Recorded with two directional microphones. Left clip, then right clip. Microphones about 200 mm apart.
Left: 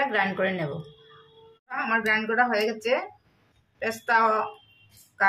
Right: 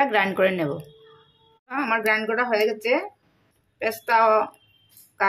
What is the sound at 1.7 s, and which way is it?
A woman's voice, 35° right (ahead or behind).